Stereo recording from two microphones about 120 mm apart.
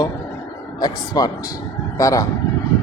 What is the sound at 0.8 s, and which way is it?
A woman's voice, 30° left (ahead or behind).